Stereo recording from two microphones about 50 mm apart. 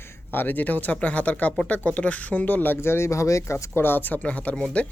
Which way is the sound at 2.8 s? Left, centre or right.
Left.